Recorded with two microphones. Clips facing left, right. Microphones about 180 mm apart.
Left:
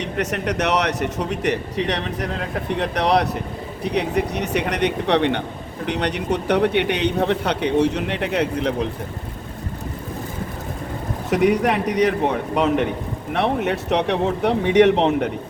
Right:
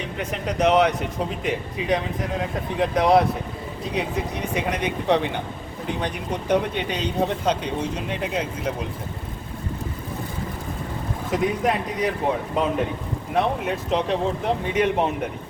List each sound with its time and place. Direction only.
0.0 s a man's voice: 75° left (ahead or behind)
11.3 s a man's voice: 70° left (ahead or behind)